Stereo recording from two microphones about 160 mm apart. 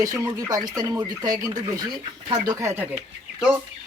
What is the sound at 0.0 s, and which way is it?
Speech, 20° right (ahead or behind).